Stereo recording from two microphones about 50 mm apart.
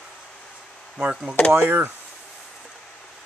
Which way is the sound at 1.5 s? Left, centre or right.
Right.